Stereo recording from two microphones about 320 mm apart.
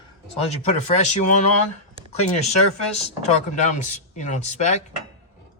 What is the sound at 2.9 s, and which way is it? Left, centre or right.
Speech, centre.